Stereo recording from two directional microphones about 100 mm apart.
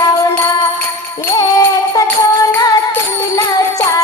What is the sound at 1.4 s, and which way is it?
Music, 40° left (ahead or behind).